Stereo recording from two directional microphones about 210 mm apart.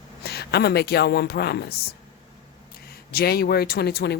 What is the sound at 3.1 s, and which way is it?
Speech, 45° left (ahead or behind).